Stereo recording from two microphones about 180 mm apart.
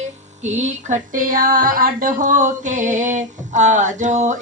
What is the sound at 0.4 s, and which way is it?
Female singing, 40° right (ahead or behind).